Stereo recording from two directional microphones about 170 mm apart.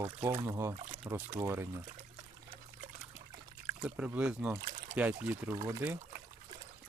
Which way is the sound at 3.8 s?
5° right (ahead or behind).